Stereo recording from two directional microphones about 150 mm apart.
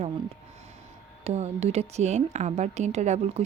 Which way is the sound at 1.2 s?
45° right (ahead or behind).